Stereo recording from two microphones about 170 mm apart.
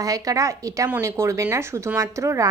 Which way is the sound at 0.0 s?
20° right (ahead or behind).